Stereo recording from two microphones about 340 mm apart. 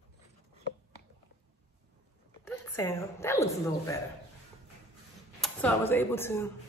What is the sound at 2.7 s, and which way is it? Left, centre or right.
A woman's voice, centre.